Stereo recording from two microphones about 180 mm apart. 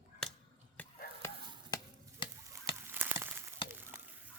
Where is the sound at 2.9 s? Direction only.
10° right (ahead or behind).